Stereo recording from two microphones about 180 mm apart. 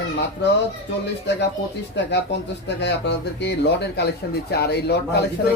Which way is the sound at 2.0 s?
70° left (ahead or behind).